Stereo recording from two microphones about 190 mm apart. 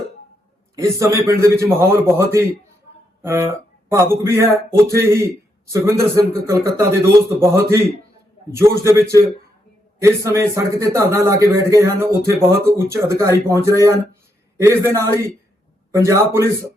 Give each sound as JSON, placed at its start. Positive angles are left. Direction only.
{"t": 0.8, "sound": "speech", "side_deg": -15}
{"t": 10.0, "sound": "speech", "side_deg": -15}